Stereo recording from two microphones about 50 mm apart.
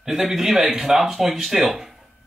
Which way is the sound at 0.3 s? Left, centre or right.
Centre.